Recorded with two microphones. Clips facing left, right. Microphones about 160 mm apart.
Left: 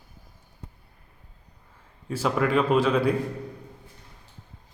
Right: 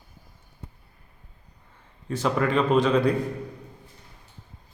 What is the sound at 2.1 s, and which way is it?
A man's voice, 5° left (ahead or behind).